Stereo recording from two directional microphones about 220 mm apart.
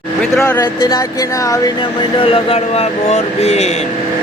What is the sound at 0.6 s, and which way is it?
Speech, 20° left (ahead or behind).